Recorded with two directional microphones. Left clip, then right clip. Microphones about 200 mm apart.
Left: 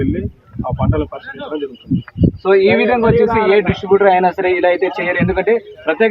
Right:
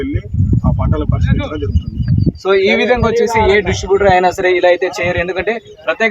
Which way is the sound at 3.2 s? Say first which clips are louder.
Even; 40° left (ahead or behind).